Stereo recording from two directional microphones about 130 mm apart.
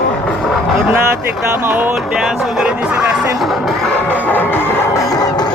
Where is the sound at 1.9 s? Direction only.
Centre (ahead or behind).